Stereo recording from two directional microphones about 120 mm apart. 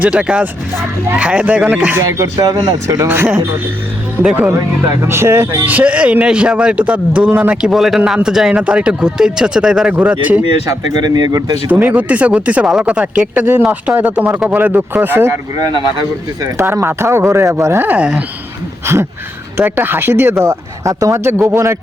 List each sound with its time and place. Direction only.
0.0 s speech: 10° right (ahead or behind)
10.7 s speech: 35° right (ahead or behind)
11.7 s speech: 15° right (ahead or behind)
16.6 s speech: 20° right (ahead or behind)
19.5 s speech: 15° right (ahead or behind)